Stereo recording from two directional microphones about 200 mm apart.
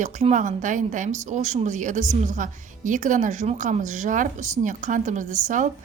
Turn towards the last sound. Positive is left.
turn(degrees=-40)  # may be behind; listen again after turning